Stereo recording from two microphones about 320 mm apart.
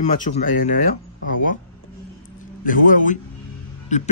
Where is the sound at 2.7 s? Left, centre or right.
Left.